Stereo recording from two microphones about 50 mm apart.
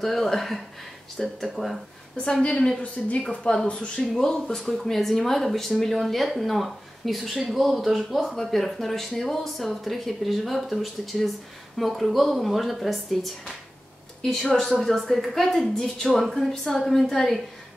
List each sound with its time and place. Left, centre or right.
0.0 s speech: centre
2.4 s speech: centre